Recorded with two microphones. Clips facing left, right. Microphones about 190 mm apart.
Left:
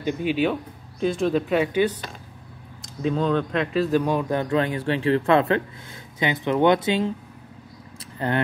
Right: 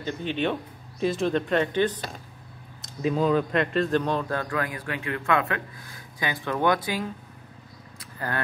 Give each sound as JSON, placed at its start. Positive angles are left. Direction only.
{"t": 0.0, "sound": "speech", "side_deg": 10}
{"t": 2.8, "sound": "a man's voice", "side_deg": -5}
{"t": 8.0, "sound": "vehicle", "side_deg": 25}